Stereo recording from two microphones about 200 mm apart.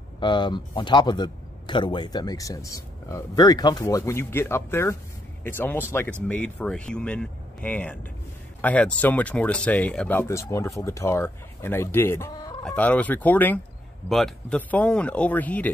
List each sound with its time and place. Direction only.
0.2 s speech: 25° left (ahead or behind); by 15.7 s 10° left (ahead or behind)